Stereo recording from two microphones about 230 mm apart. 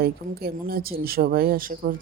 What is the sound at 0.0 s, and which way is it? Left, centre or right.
Speech, right.